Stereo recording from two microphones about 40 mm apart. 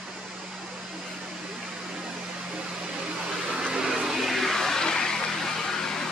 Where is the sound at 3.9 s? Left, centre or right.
Centre.